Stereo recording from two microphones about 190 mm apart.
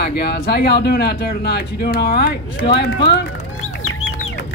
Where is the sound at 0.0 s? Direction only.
60° left (ahead or behind).